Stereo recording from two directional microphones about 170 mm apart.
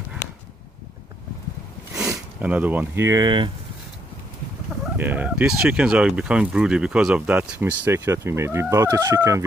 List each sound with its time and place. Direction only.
2.0 s speech: 10° right (ahead or behind); by 3.4 s 25° right (ahead or behind)
4.9 s speech: 10° right (ahead or behind)